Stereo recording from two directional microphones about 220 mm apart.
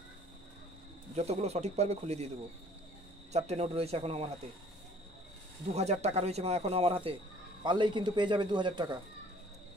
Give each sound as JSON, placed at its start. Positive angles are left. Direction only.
{"t": 1.1, "sound": "speech", "side_deg": -30}
{"t": 3.3, "sound": "speech", "side_deg": -30}
{"t": 5.7, "sound": "speech", "side_deg": -30}